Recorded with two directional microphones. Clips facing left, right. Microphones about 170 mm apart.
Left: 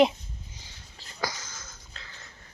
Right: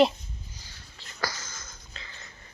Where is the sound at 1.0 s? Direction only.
40° left (ahead or behind).